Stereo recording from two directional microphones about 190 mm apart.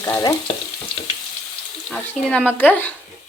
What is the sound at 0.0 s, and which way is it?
Speech, 15° left (ahead or behind).